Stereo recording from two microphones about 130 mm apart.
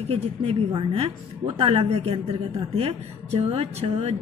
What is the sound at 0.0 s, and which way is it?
A woman's voice, 45° right (ahead or behind).